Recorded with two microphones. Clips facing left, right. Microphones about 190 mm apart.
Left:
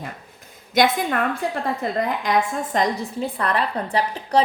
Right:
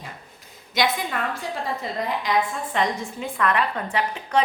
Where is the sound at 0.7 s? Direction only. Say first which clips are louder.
Left 5 dB; 50° left (ahead or behind).